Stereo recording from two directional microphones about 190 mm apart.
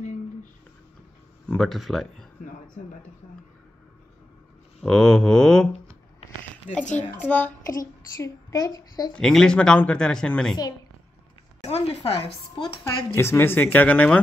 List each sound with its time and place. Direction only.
1.5 s a woman's voice: centre (ahead or behind)
4.8 s a woman's voice: 5° left (ahead or behind)
7.1 s speech: 10° left (ahead or behind)
7.6 s a child's voice: 20° left (ahead or behind)
9.1 s a woman's voice: 5° left (ahead or behind)
11.6 s a woman's voice: 35° left (ahead or behind)
13.1 s speech: 15° left (ahead or behind)